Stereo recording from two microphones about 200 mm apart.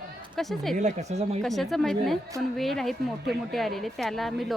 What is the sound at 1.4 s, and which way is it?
Speech, centre (ahead or behind).